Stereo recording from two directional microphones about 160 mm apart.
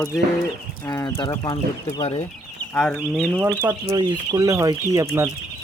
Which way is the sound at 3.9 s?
25° right (ahead or behind).